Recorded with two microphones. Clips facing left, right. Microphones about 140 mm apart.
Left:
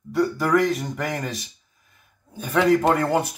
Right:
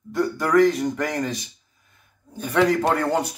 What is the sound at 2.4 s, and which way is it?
Speech, centre (ahead or behind).